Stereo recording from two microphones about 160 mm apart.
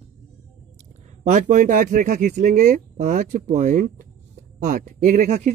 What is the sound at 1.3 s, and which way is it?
Speech, 50° right (ahead or behind).